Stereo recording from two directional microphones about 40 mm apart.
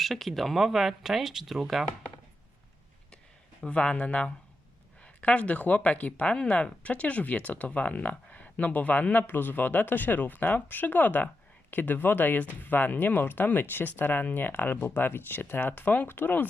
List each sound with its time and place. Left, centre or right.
0.0 s speech: centre
3.7 s speech: left
9.2 s speech: left
16.0 s speech: left